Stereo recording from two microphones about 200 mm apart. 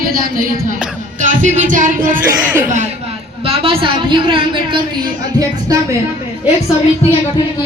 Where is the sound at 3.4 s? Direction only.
30° right (ahead or behind).